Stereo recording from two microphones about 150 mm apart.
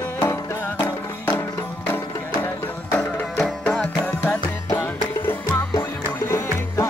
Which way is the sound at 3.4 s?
5° left (ahead or behind).